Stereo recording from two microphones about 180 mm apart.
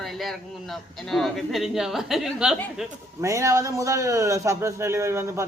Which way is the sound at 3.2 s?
15° right (ahead or behind).